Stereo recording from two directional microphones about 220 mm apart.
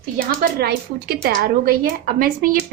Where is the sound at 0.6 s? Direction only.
45° right (ahead or behind).